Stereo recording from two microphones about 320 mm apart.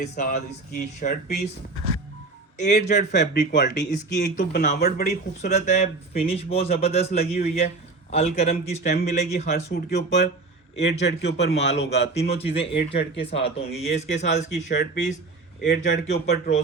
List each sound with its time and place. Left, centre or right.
0.0 s speech: left
2.6 s speech: left
9.7 s a man's voice: left
11.9 s speech: centre
12.9 s a man's voice: left
13.4 s speech: centre